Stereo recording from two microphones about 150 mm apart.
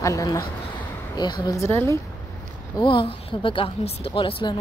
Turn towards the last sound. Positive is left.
turn(degrees=35)  # may be behind; listen again after turning